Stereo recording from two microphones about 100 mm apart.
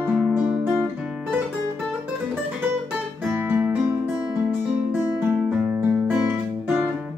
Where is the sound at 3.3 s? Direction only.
20° right (ahead or behind).